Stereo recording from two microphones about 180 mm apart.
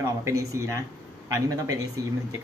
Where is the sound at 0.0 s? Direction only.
15° right (ahead or behind).